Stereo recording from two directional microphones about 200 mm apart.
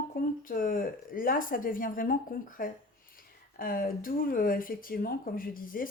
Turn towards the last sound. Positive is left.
turn(degrees=45)  # may be behind; listen again after turning